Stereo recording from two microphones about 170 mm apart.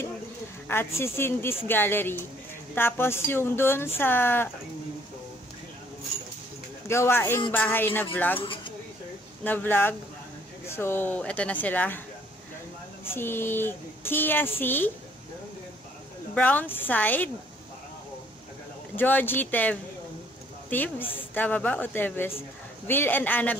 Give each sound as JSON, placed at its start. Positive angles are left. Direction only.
{"t": 0.7, "sound": "speech", "side_deg": 15}
{"t": 6.9, "sound": "speech", "side_deg": 15}
{"t": 8.4, "sound": "speech", "side_deg": 30}
{"t": 9.4, "sound": "speech", "side_deg": 10}
{"t": 13.0, "sound": "speech", "side_deg": 15}
{"t": 16.3, "sound": "speech", "side_deg": 10}
{"t": 18.9, "sound": "speech", "side_deg": 10}